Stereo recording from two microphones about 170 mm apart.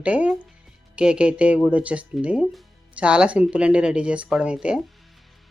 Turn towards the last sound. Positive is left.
turn(degrees=-5)  # may be behind; listen again after turning